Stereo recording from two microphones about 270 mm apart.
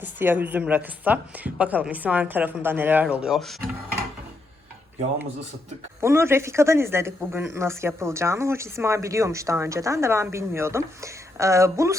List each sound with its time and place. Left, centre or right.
0.0 s a woman's voice: centre
6.0 s speech: centre